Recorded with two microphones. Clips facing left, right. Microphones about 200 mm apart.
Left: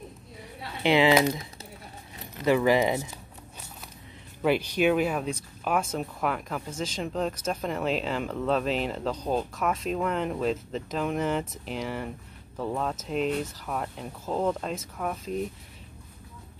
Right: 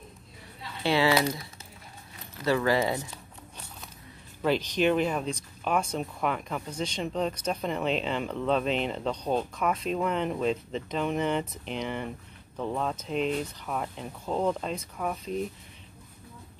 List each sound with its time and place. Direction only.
0.8 s speech: 20° left (ahead or behind)
4.4 s speech: 10° left (ahead or behind)